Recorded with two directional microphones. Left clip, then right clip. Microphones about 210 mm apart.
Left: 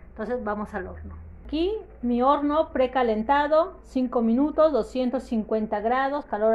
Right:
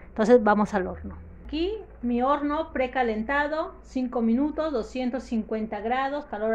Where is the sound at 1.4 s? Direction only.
20° left (ahead or behind).